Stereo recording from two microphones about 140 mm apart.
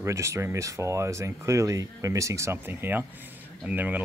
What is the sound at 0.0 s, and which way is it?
Speech, 20° right (ahead or behind).